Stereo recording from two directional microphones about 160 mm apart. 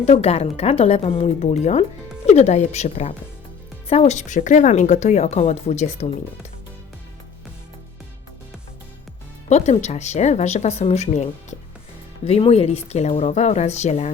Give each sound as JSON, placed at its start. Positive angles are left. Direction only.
{"t": 0.0, "sound": "a woman's voice", "side_deg": 40}
{"t": 9.5, "sound": "speech", "side_deg": 45}